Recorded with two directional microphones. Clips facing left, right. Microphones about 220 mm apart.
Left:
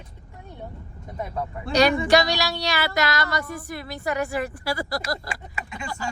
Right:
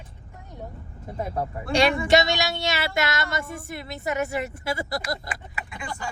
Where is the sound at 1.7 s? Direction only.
25° right (ahead or behind).